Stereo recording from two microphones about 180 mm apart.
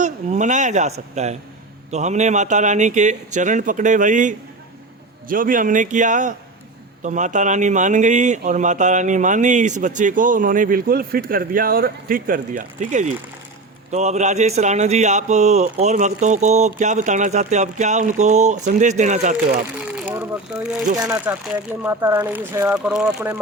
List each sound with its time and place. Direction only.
0.0 s a man's voice: 40° right (ahead or behind)
19.9 s a sound: 5° right (ahead or behind)
21.1 s speech: 10° right (ahead or behind)